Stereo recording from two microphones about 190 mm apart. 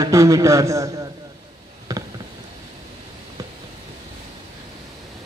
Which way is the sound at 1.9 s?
15° right (ahead or behind).